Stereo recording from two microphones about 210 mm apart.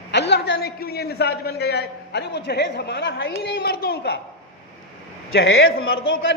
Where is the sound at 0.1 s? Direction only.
55° left (ahead or behind).